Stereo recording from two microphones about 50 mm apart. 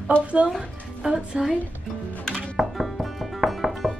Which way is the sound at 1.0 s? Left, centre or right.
Centre.